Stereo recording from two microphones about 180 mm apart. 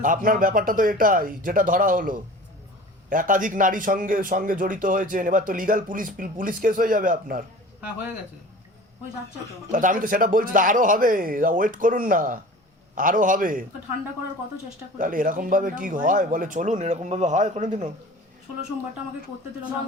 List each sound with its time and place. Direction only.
0.0 s a man's voice: 50° right (ahead or behind)
9.7 s a man's voice: 50° right (ahead or behind)
14.9 s a man's voice: 50° right (ahead or behind)